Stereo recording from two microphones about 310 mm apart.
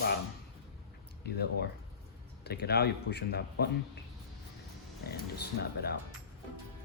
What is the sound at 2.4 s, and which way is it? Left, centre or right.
A man's voice, left.